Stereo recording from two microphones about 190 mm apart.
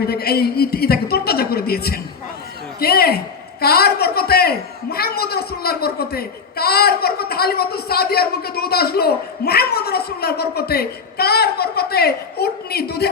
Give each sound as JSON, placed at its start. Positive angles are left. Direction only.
{"t": 0.1, "sound": "a man's voice", "side_deg": 55}